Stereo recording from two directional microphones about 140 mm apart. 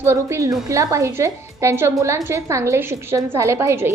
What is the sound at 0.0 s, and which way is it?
A woman's voice, 20° right (ahead or behind).